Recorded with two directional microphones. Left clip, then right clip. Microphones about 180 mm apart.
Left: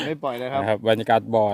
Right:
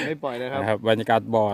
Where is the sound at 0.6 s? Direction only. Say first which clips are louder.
Left 1 dB; 10° left (ahead or behind).